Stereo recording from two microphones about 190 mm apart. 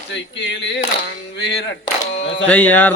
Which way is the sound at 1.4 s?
65° left (ahead or behind).